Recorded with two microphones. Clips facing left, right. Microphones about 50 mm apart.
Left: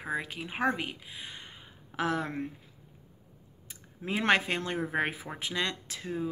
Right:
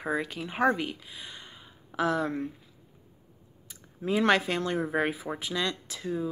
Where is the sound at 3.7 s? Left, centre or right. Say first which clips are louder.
Right 5 dB; left.